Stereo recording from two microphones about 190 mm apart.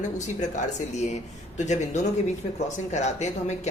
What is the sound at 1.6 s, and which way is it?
Speech, 40° left (ahead or behind).